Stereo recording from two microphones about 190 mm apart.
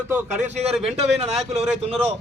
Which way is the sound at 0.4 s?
35° right (ahead or behind).